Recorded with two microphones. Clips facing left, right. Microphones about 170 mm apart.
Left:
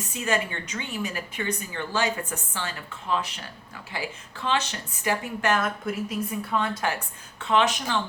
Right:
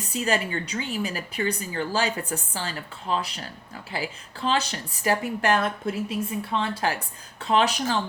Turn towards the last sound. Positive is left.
turn(degrees=-35)  # may be behind; listen again after turning